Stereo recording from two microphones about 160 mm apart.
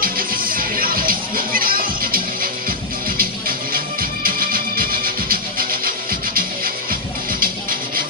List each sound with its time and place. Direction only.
0.0 s music: 65° right (ahead or behind)